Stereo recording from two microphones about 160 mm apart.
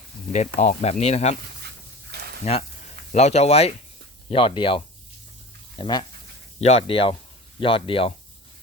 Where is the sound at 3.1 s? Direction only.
45° left (ahead or behind).